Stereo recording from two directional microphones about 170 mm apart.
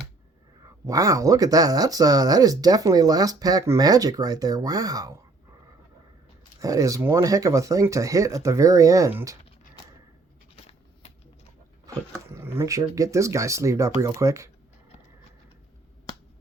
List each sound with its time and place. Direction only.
0.9 s speech: 20° right (ahead or behind)
6.6 s speech: 20° right (ahead or behind)
10.5 s scissors: 35° left (ahead or behind)
11.9 s speech: 20° right (ahead or behind)